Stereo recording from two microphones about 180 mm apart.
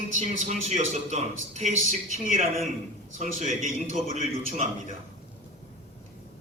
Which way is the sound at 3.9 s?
40° left (ahead or behind).